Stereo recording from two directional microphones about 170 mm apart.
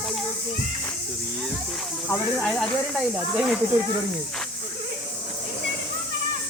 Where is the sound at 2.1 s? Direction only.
5° left (ahead or behind).